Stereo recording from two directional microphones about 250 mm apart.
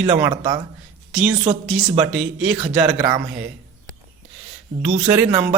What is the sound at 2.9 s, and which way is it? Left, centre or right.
Speech, centre.